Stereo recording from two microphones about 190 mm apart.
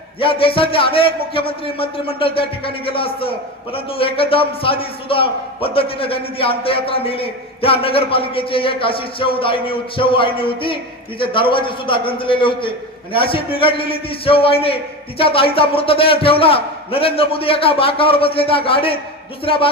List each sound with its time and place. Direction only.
0.2 s a man's voice: 30° left (ahead or behind)